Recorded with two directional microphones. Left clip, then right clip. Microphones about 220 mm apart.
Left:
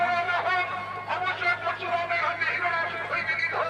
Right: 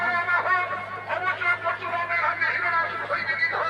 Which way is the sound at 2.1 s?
45° left (ahead or behind).